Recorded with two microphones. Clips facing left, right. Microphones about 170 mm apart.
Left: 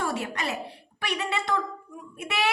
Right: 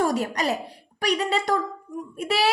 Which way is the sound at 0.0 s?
40° right (ahead or behind).